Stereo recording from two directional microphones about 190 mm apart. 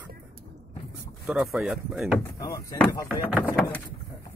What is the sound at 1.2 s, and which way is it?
Speech, centre (ahead or behind).